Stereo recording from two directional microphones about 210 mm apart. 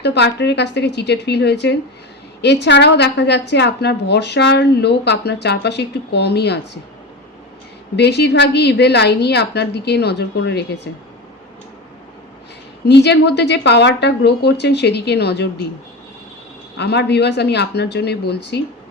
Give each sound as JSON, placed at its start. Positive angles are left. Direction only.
{"t": 0.0, "sound": "a woman's voice", "side_deg": 55}
{"t": 7.9, "sound": "a woman's voice", "side_deg": 55}
{"t": 12.8, "sound": "a woman's voice", "side_deg": 55}
{"t": 16.7, "sound": "a woman's voice", "side_deg": 55}